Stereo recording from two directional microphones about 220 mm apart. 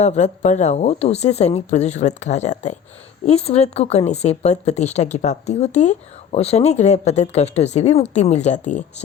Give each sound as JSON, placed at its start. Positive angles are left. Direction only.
{"t": 0.0, "sound": "speech", "side_deg": 30}